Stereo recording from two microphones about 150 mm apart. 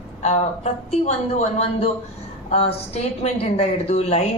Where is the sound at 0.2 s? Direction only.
45° left (ahead or behind).